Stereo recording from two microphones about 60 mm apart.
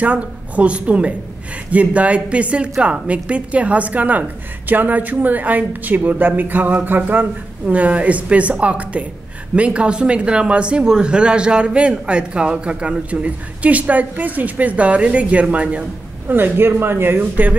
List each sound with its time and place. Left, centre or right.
0.0 s a woman's voice: right
16.3 s a man's voice: right